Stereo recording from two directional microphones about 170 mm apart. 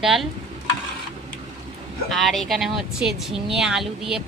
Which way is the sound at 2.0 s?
Centre (ahead or behind).